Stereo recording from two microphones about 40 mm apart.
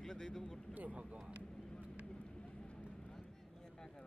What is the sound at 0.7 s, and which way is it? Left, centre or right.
Speech, right.